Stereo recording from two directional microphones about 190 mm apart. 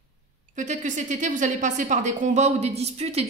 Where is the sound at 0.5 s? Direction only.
40° right (ahead or behind).